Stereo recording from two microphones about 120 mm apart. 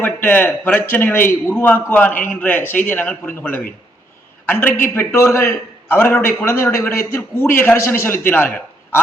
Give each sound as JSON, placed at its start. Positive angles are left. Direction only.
{"t": 0.0, "sound": "a man's voice", "side_deg": 15}